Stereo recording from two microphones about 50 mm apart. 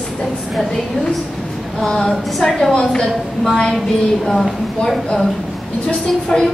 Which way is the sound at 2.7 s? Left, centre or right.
Centre.